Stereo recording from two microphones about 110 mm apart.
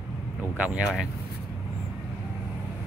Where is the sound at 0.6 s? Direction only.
15° right (ahead or behind).